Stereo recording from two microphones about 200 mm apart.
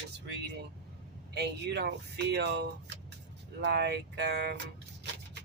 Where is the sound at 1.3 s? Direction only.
60° right (ahead or behind).